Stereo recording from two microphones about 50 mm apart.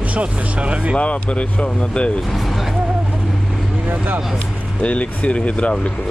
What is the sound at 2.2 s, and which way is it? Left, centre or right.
Speech, centre.